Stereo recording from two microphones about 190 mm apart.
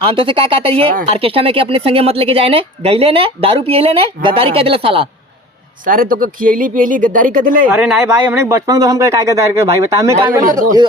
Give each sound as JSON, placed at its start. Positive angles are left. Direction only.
{"t": 0.0, "sound": "speech", "side_deg": -25}
{"t": 5.8, "sound": "speech", "side_deg": -45}
{"t": 7.7, "sound": "speech", "side_deg": -5}
{"t": 8.4, "sound": "speech", "side_deg": -15}